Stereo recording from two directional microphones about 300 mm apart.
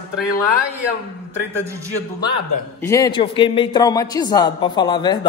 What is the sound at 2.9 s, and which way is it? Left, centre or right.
Speech, centre.